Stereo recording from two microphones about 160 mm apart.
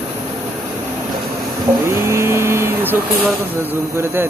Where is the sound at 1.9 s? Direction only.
15° right (ahead or behind).